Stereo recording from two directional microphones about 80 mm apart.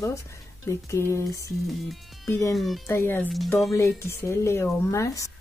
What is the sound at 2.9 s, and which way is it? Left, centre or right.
Speech, left.